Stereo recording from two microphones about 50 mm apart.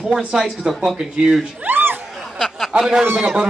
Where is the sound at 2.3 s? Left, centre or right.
Centre.